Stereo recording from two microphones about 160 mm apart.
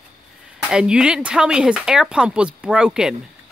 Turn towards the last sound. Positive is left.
turn(degrees=-5)  # may be behind; listen again after turning